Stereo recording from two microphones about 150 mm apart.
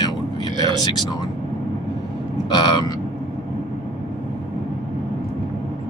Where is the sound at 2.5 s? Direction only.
25° left (ahead or behind).